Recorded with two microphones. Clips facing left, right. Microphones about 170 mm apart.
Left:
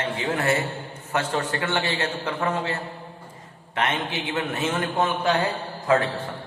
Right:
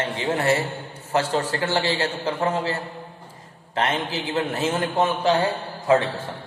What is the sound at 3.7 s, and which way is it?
A man's voice, 30° right (ahead or behind).